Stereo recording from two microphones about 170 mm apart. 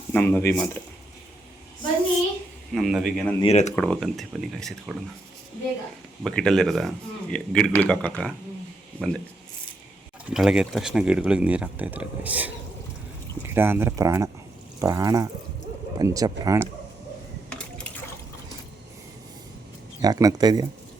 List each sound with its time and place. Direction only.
0.1 s speech: 10° left (ahead or behind)
2.7 s speech: centre (ahead or behind)
3.4 s speech: 40° left (ahead or behind)
3.7 s speech: 5° left (ahead or behind)
6.2 s speech: 5° left (ahead or behind)
10.2 s speech: 5° right (ahead or behind); by 16.6 s 20° right (ahead or behind)
17.5 s water: 5° left (ahead or behind)
20.0 s speech: 20° right (ahead or behind)